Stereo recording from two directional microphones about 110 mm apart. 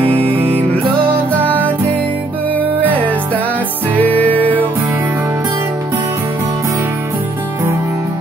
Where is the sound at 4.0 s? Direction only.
15° left (ahead or behind).